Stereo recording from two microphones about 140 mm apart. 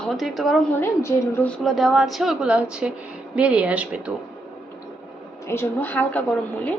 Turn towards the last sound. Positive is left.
turn(degrees=10)  # may be behind; listen again after turning